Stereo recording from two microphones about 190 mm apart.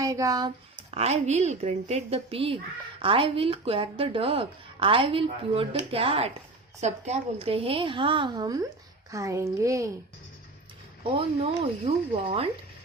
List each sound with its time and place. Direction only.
0.0 s speech: 15° right (ahead or behind)
0.8 s a woman's voice: 30° right (ahead or behind); by 9.9 s 15° right (ahead or behind)
11.0 s speech: 30° right (ahead or behind)